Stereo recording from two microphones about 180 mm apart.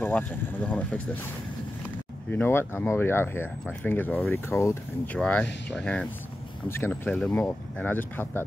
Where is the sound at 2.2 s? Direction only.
10° left (ahead or behind).